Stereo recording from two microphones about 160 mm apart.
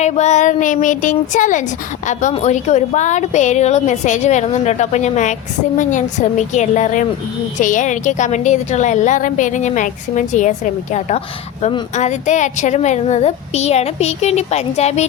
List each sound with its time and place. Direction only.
0.0 s a woman's voice: 45° left (ahead or behind)